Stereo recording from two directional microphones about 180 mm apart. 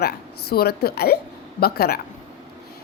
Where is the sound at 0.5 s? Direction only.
60° left (ahead or behind).